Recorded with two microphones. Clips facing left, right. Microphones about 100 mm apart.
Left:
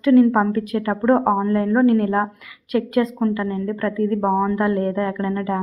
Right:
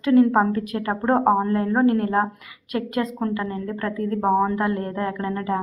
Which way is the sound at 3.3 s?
20° right (ahead or behind).